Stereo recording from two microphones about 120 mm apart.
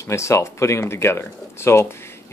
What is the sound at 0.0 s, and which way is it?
Speech, 25° left (ahead or behind).